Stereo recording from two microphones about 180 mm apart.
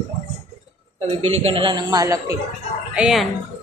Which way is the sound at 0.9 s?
30° right (ahead or behind).